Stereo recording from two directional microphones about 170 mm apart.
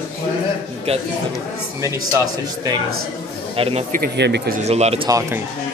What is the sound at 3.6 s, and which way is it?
Speech, 35° right (ahead or behind).